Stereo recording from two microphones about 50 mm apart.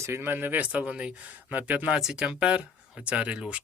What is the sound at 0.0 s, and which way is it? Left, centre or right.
Speech, right.